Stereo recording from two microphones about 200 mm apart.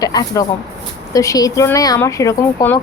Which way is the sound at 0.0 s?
20° left (ahead or behind).